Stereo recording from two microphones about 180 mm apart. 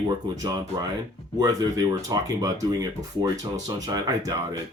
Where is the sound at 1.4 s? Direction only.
20° right (ahead or behind).